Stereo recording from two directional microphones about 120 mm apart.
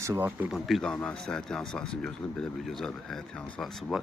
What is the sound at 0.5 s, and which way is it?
A man's voice, centre (ahead or behind).